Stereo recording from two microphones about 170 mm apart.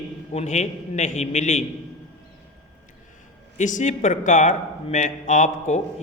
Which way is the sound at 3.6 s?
45° left (ahead or behind).